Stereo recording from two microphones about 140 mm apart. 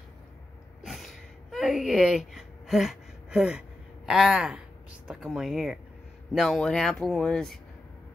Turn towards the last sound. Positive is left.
turn(degrees=5)  # may be behind; listen again after turning